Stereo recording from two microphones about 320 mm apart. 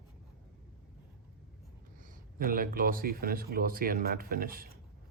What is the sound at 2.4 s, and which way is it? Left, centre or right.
Speech, right.